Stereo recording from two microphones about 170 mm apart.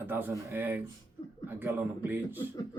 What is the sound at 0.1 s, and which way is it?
Speech, 10° right (ahead or behind).